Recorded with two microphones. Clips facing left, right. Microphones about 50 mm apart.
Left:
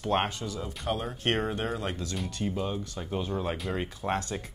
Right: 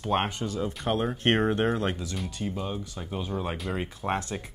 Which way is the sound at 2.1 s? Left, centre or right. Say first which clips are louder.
Left 1 dB; centre.